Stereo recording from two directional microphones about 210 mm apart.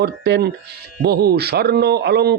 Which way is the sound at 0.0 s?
50° right (ahead or behind).